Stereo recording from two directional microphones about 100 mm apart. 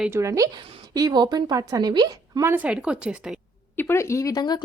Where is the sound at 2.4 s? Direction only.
15° right (ahead or behind).